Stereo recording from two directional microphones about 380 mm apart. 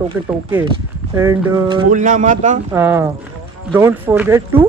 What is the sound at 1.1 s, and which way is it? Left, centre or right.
Speech, centre.